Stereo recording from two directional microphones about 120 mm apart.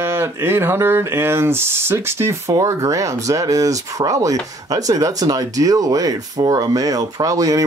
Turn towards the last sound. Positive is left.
turn(degrees=-30)  # may be behind; listen again after turning